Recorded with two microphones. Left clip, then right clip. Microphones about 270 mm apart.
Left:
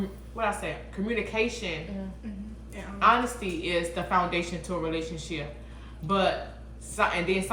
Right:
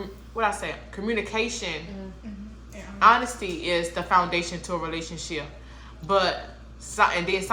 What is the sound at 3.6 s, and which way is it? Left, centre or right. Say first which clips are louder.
Speech: right 4 dB; right.